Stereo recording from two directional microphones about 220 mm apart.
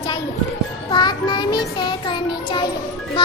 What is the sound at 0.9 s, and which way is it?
Music, 20° left (ahead or behind).